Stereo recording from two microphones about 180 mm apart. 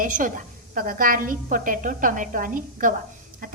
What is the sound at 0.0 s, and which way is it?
A woman's voice, 50° right (ahead or behind).